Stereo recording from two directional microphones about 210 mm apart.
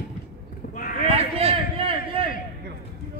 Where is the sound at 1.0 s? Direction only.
30° right (ahead or behind).